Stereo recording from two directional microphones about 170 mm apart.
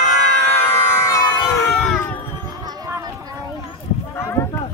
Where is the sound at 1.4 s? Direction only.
5° left (ahead or behind).